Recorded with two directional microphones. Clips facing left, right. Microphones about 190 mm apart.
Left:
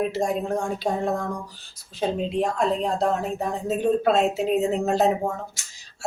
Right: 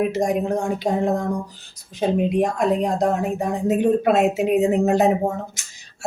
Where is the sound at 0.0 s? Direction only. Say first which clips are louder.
Right 4 dB; 15° right (ahead or behind).